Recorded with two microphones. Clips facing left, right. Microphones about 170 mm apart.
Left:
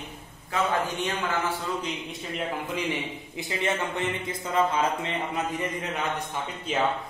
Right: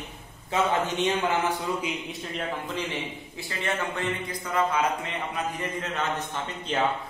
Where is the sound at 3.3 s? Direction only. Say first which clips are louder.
Left 3 dB; 20° left (ahead or behind).